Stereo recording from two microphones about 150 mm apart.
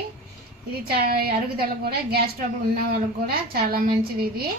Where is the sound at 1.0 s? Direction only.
90° right.